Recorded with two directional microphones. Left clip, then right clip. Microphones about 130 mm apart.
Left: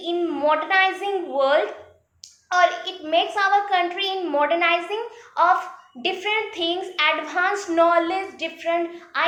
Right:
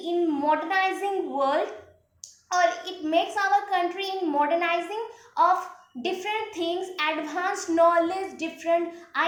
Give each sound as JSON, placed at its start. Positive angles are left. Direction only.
{"t": 0.0, "sound": "a child's voice", "side_deg": -30}